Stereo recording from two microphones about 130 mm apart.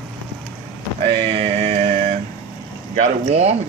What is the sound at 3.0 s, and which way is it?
Speech, 55° right (ahead or behind).